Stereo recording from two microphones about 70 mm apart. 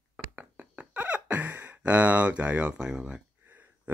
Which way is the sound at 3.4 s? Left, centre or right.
Right.